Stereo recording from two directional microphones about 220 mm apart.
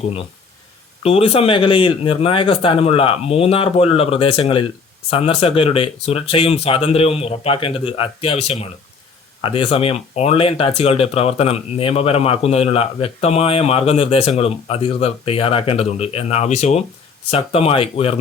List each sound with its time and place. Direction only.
1.0 s speech: 25° left (ahead or behind)